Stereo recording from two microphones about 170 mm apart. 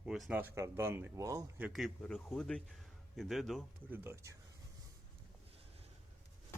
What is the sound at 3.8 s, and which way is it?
Speech, 10° right (ahead or behind).